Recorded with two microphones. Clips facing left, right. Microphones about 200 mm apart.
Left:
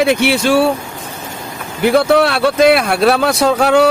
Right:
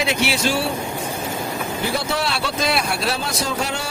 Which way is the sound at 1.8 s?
60° left (ahead or behind).